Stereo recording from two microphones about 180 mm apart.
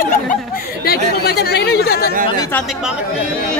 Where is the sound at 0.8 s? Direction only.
60° left (ahead or behind).